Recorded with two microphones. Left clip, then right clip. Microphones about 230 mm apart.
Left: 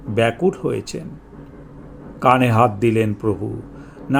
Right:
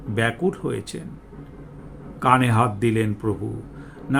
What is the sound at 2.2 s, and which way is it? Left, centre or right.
Speech, centre.